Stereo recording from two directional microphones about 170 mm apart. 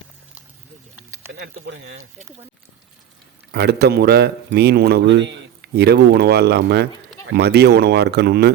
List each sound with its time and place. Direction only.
1.6 s speech: 90° right
3.5 s speech: 75° right (ahead or behind)